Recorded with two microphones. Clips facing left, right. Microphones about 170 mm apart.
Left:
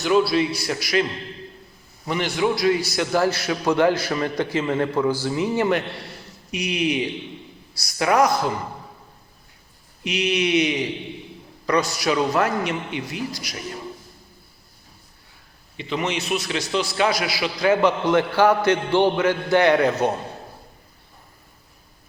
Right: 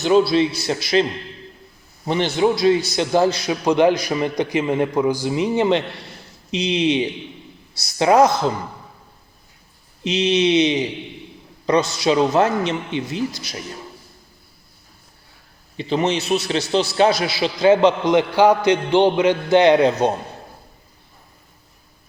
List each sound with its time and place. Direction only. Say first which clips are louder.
0.0 s a man's voice: right 3 dB; 25° right (ahead or behind)
2.0 s a man's voice: right 4 dB; 25° right (ahead or behind)
10.0 s a man's voice: right 5 dB; 25° right (ahead or behind)
15.8 s a man's voice: right 5 dB; 35° right (ahead or behind)